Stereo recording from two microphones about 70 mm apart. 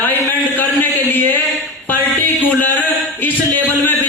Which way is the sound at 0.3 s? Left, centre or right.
Left.